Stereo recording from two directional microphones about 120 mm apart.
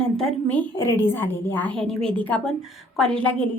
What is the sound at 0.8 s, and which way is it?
A woman's voice, 20° left (ahead or behind).